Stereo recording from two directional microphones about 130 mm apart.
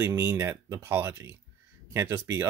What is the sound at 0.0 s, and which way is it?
Speech, 20° right (ahead or behind).